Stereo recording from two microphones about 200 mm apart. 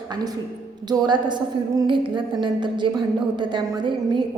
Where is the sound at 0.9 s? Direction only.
20° right (ahead or behind).